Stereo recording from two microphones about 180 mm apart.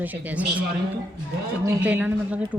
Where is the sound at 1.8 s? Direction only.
10° right (ahead or behind).